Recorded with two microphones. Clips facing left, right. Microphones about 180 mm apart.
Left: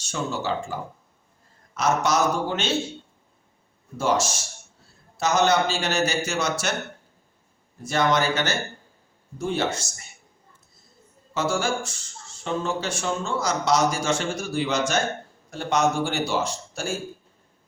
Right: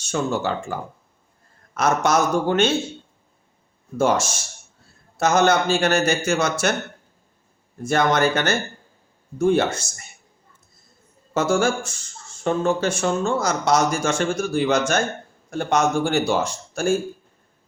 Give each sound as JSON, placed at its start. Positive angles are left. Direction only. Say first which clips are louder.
{"t": 0.0, "sound": "speech", "louder": "right 5 dB", "side_deg": -55}
{"t": 3.9, "sound": "speech", "louder": "right 3 dB", "side_deg": -50}
{"t": 7.8, "sound": "speech", "louder": "right 3 dB", "side_deg": -50}
{"t": 11.3, "sound": "speech", "louder": "right 5 dB", "side_deg": -50}